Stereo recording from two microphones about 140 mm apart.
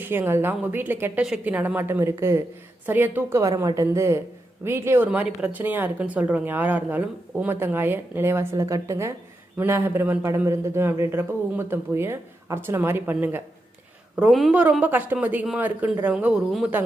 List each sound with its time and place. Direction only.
0.0 s a woman's voice: 15° right (ahead or behind)
14.2 s a woman's voice: centre (ahead or behind)